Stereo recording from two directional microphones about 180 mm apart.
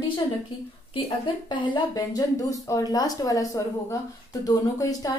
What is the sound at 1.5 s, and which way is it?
A woman's voice, 25° left (ahead or behind).